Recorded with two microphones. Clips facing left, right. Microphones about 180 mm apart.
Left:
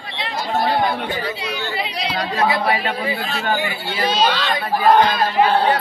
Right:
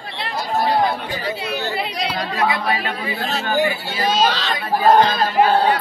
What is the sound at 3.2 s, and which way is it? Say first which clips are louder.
Speech: right 2 dB; 40° right (ahead or behind).